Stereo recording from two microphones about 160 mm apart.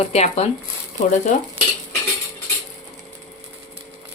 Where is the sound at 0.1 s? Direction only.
40° left (ahead or behind).